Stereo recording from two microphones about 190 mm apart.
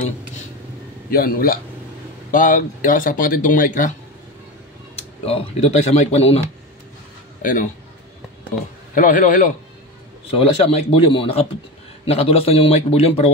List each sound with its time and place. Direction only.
1.1 s speech: 50° left (ahead or behind)
5.2 s a man's voice: 30° left (ahead or behind)
7.4 s speech: 45° left (ahead or behind)
8.9 s speech: 45° left (ahead or behind)
10.3 s a man's voice: 30° left (ahead or behind)